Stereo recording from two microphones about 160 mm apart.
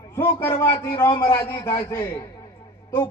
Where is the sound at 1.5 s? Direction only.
25° left (ahead or behind).